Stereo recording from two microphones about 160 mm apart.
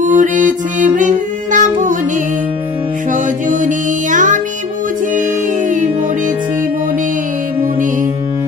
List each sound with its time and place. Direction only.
0.0 s music: 55° right (ahead or behind)
3.1 s music: 55° right (ahead or behind)